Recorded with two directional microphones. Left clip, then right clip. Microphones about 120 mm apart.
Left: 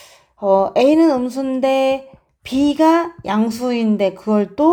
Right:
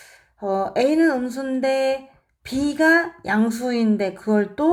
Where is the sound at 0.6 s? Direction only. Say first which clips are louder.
Left 4 dB; 50° left (ahead or behind).